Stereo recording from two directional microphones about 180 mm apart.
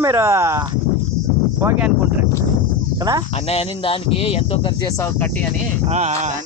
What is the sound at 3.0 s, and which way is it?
Speech, 20° right (ahead or behind).